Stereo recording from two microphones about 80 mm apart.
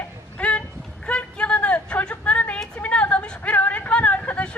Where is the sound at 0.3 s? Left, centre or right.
Centre.